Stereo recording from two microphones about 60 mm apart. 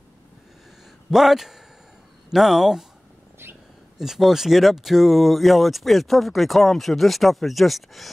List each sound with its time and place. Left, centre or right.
1.1 s speech: centre
4.0 s speech: centre